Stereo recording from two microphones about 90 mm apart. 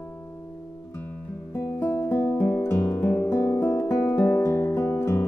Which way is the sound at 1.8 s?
25° left (ahead or behind).